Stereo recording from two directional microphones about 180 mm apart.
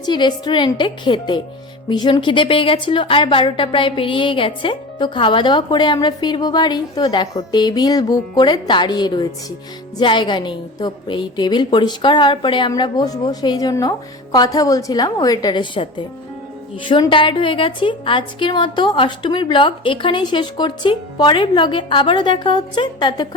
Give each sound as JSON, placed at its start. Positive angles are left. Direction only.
{"t": 0.0, "sound": "a woman's voice", "side_deg": 25}